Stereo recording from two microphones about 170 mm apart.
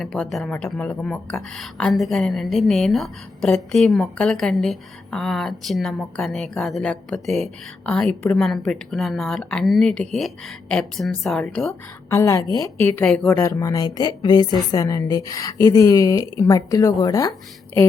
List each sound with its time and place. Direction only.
0.0 s a woman's voice: centre (ahead or behind)
12.1 s a woman's voice: 20° left (ahead or behind)
13.4 s a woman's voice: 20° left (ahead or behind)